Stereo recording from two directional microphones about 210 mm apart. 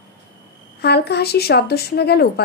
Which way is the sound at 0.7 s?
50° left (ahead or behind).